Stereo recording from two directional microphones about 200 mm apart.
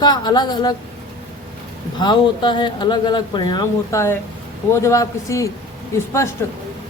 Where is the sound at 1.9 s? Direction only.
20° left (ahead or behind).